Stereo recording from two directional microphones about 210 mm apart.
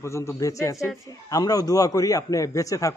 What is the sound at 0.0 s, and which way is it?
A man's voice, 15° left (ahead or behind).